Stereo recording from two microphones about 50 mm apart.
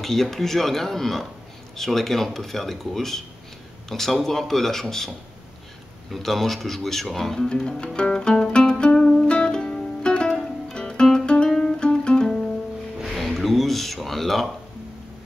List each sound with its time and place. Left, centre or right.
0.0 s speech: centre
6.1 s speech: centre
9.2 s music: centre
13.0 s a sound: centre